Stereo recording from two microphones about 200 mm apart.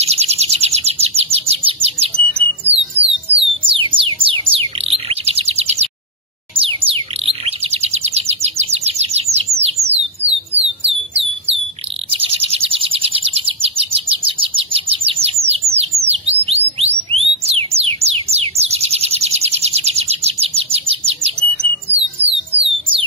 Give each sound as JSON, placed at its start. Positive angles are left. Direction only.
{"t": 0.0, "sound": "bird", "side_deg": -30}
{"t": 6.5, "sound": "chirp", "side_deg": -25}
{"t": 9.6, "sound": "a sound", "side_deg": -30}
{"t": 12.1, "sound": "bird", "side_deg": -30}
{"t": 16.0, "sound": "music", "side_deg": -30}